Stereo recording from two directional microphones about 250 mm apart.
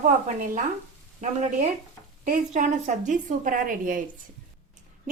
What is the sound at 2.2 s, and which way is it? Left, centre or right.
A woman's voice, right.